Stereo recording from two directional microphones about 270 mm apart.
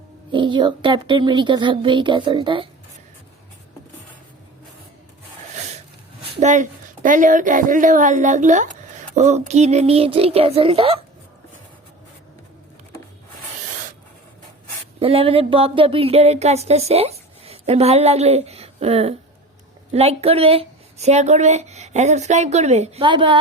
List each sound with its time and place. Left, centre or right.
0.3 s a woman's voice: centre
6.3 s speech: right
14.9 s speech: right